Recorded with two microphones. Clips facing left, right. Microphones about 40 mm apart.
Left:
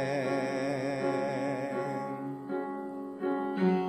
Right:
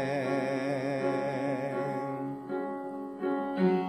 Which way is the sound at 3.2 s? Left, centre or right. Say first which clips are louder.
Right 1 dB; centre.